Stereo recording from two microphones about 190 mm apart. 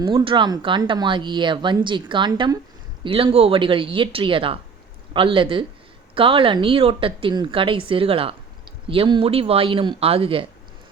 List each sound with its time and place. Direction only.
0.0 s speech: 20° right (ahead or behind)